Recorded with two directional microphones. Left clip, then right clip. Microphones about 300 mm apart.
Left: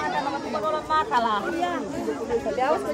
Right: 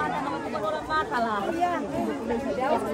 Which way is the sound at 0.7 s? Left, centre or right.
Centre.